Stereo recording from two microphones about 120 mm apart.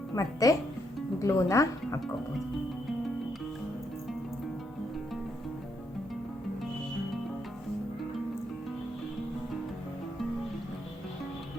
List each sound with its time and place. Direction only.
0.2 s speech: 30° left (ahead or behind)